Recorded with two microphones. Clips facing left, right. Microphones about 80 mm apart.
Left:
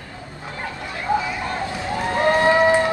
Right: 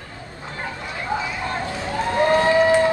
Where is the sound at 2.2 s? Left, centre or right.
Left.